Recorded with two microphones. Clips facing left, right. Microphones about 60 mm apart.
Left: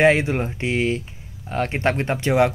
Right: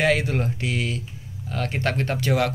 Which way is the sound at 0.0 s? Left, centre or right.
Left.